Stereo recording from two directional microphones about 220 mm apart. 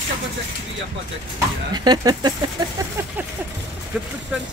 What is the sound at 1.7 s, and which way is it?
Speech, 20° right (ahead or behind).